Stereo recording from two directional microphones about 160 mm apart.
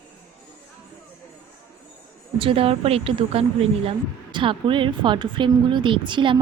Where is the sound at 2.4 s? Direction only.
35° right (ahead or behind).